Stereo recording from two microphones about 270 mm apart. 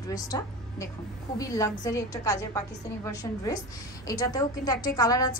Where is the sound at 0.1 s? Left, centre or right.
Centre.